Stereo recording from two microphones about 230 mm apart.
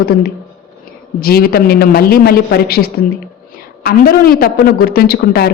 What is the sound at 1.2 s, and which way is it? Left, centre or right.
A woman's voice, left.